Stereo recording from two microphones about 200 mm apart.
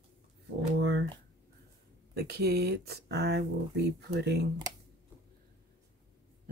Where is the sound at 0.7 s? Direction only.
60° right (ahead or behind).